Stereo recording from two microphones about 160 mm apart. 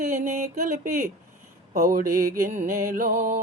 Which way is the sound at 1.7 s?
65° right (ahead or behind).